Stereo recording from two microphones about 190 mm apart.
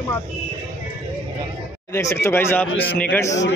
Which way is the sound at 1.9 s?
15° left (ahead or behind).